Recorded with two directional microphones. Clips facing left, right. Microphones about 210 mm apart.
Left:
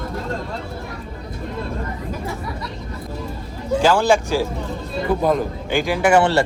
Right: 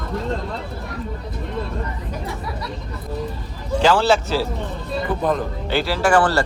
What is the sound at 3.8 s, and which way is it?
Speech, 10° left (ahead or behind).